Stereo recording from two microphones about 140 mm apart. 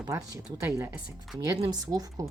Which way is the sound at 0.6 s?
20° right (ahead or behind).